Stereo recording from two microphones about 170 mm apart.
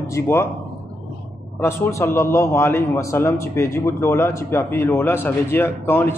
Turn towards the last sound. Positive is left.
turn(degrees=15)  # may be behind; listen again after turning